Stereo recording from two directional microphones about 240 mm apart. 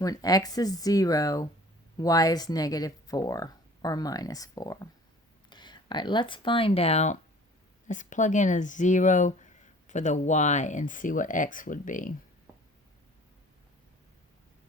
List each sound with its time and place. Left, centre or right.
0.0 s speech: centre; by 12.1 s left